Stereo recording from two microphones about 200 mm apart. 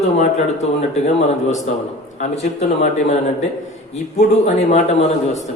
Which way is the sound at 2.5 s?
35° left (ahead or behind).